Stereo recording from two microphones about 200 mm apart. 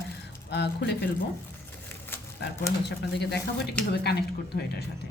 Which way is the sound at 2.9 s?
55° left (ahead or behind).